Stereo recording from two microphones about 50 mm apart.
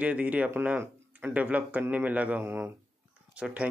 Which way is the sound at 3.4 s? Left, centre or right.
Right.